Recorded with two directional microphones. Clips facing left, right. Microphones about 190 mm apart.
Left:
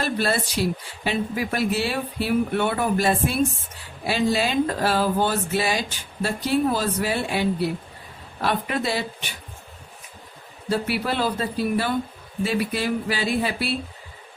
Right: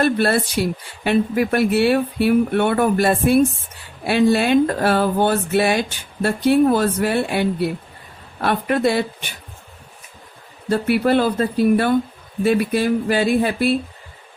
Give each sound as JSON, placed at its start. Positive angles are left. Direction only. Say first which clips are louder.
{"t": 0.0, "sound": "speech", "louder": "right 7 dB", "side_deg": -60}
{"t": 10.7, "sound": "speech", "louder": "right 7 dB", "side_deg": -55}